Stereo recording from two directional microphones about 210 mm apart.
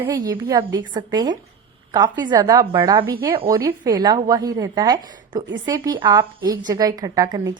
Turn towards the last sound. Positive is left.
turn(degrees=-20)  # may be behind; listen again after turning